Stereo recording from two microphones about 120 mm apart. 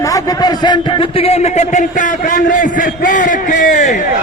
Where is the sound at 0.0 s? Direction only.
30° left (ahead or behind); by 3.9 s 90° left.